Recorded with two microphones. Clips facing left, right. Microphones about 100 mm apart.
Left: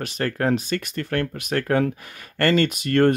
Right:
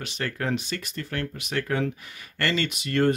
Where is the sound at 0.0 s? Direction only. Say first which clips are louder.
Left 6 dB; 45° left (ahead or behind).